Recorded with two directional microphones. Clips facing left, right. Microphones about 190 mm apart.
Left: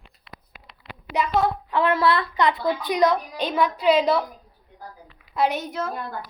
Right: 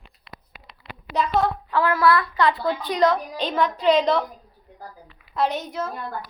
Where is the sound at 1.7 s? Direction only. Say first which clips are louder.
Right 1 dB; 25° left (ahead or behind); by 4.2 s 5° left (ahead or behind).